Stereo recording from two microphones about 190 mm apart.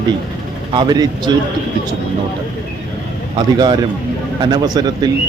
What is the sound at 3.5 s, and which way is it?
Speech, 20° right (ahead or behind).